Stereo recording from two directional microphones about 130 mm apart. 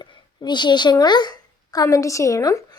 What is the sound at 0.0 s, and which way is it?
A woman's voice, 35° left (ahead or behind).